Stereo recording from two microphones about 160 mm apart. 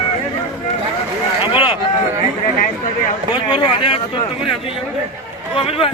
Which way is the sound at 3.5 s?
30° left (ahead or behind).